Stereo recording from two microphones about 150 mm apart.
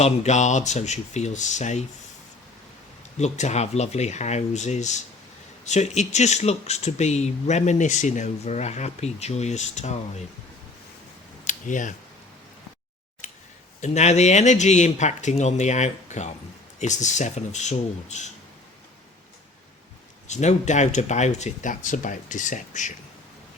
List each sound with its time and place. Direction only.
0.0 s speech: 50° left (ahead or behind)
3.2 s speech: 50° left (ahead or behind)
11.4 s a sound: 55° left (ahead or behind)
13.8 s speech: 50° left (ahead or behind)
20.2 s speech: 50° left (ahead or behind)